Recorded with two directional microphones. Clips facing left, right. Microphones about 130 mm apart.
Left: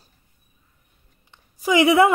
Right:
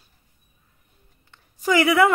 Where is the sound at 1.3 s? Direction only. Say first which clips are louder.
Left 1 dB; 15° left (ahead or behind).